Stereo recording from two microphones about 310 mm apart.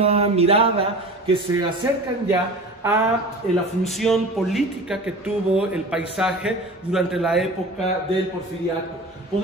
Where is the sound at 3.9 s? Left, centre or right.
Centre.